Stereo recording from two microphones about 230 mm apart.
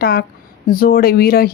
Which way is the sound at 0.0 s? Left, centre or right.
Left.